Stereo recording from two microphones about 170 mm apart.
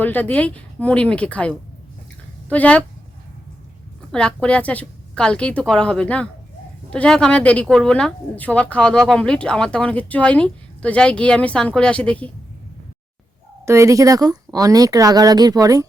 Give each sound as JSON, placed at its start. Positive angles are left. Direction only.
{"t": 0.0, "sound": "speech", "side_deg": 10}
{"t": 4.1, "sound": "speech", "side_deg": 5}
{"t": 13.7, "sound": "speech", "side_deg": -15}